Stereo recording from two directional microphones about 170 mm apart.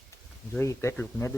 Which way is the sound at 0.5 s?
15° left (ahead or behind).